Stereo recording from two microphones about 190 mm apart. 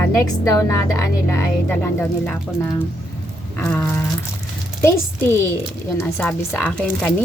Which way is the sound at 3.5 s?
10° left (ahead or behind).